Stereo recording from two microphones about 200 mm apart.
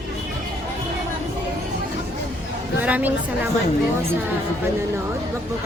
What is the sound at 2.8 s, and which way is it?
Speech, 10° right (ahead or behind).